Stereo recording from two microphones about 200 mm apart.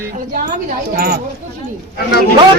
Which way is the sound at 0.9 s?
50° right (ahead or behind).